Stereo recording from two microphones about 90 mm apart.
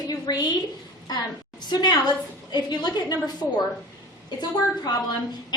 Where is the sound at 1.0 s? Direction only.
50° left (ahead or behind).